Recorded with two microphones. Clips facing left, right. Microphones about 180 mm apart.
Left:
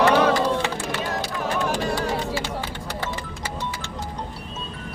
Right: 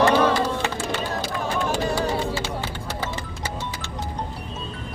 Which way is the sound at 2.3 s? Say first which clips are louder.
Even; 15° left (ahead or behind).